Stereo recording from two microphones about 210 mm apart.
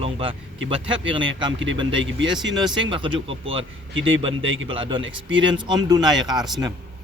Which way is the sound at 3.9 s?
65° right (ahead or behind).